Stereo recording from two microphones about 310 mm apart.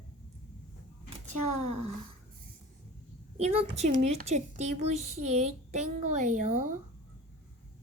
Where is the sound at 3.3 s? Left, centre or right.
Centre.